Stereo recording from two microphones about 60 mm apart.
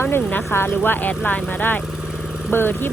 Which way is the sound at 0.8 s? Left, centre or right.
Left.